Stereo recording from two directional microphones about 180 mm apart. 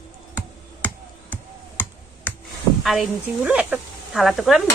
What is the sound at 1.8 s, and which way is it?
Finger snapping, 10° left (ahead or behind).